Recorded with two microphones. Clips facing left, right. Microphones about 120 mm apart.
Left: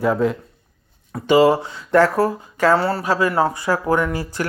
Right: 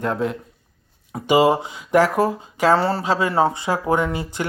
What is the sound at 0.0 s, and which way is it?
Speech, centre (ahead or behind).